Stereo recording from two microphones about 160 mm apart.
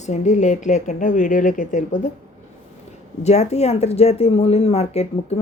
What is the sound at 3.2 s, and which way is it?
Speech, 45° left (ahead or behind).